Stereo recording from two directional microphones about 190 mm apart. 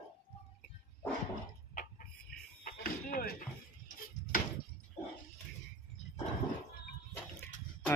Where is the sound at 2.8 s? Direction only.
50° left (ahead or behind).